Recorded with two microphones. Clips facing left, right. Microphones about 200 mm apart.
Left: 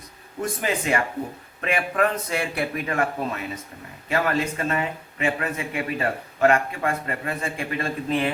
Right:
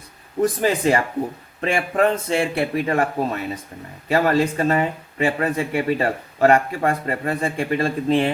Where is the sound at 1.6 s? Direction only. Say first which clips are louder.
Right 4 dB; 30° right (ahead or behind).